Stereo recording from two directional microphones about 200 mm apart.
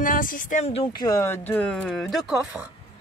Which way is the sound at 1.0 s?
15° left (ahead or behind).